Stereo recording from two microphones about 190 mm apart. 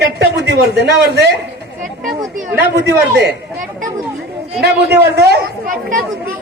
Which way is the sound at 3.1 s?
50° right (ahead or behind).